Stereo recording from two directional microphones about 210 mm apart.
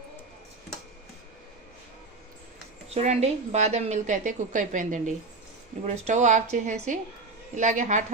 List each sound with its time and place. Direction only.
2.9 s a woman's voice: 30° right (ahead or behind)